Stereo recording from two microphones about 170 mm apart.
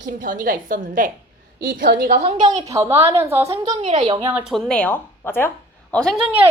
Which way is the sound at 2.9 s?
35° right (ahead or behind).